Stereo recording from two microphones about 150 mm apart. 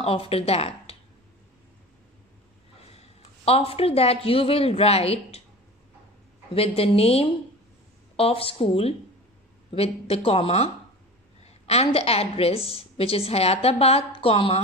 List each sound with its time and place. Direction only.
0.0 s speech: 40° left (ahead or behind)
3.0 s speech: 40° left (ahead or behind)
6.5 s a woman's voice: 40° left (ahead or behind)